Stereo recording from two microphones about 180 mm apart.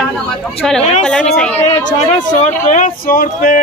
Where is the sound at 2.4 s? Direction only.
45° left (ahead or behind).